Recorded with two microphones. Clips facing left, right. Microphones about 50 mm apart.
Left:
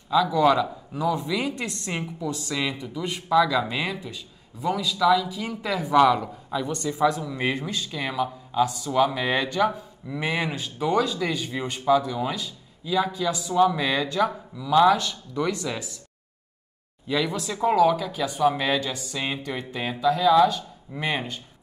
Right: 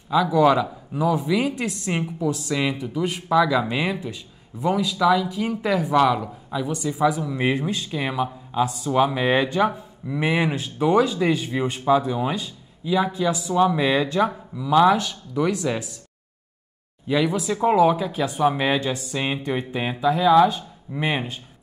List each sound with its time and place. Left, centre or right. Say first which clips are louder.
0.1 s speech: right 2 dB; centre
17.1 s speech: right 4 dB; centre